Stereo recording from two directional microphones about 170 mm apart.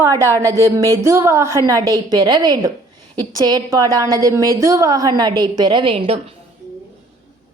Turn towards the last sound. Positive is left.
turn(degrees=-35)  # may be behind; listen again after turning